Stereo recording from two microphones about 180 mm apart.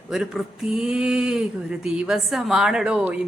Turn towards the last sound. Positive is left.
turn(degrees=-5)  # may be behind; listen again after turning